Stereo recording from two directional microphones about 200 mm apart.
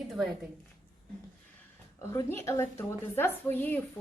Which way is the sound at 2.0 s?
15° left (ahead or behind).